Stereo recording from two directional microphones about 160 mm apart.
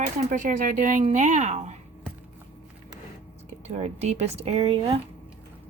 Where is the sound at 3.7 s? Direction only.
45° right (ahead or behind).